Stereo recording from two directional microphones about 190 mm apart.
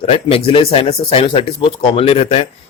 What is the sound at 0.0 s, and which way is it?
Speech, 30° left (ahead or behind).